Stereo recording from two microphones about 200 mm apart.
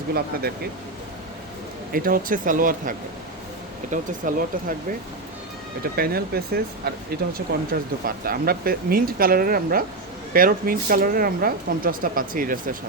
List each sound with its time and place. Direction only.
0.1 s speech: 50° right (ahead or behind)
1.9 s speech: 45° right (ahead or behind)
3.9 s speech: 45° right (ahead or behind)
5.8 s speech: 50° right (ahead or behind)